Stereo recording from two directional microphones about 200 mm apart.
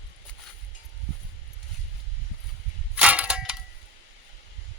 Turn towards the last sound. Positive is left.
turn(degrees=-5)  # may be behind; listen again after turning